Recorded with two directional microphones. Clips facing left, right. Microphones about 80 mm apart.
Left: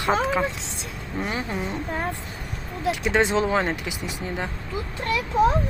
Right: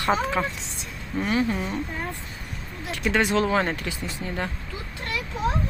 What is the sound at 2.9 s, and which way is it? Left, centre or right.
Speech, left.